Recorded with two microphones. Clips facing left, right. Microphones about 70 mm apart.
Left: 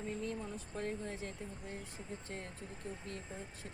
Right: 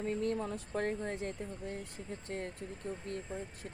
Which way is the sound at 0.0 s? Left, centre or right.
Right.